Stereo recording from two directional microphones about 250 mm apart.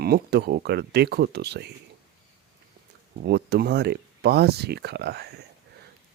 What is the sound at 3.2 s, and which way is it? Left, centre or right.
Speech, right.